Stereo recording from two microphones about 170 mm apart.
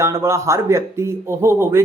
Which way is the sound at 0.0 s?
15° right (ahead or behind).